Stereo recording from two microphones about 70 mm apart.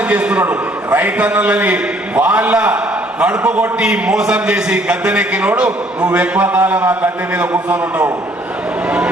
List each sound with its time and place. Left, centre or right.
0.0 s a man's voice: centre